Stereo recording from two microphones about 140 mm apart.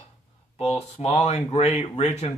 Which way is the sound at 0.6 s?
45° left (ahead or behind).